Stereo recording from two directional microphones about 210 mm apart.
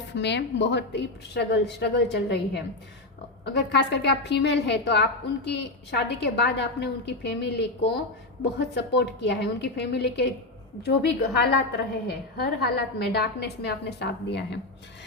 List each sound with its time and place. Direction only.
0.1 s a woman's voice: 55° left (ahead or behind)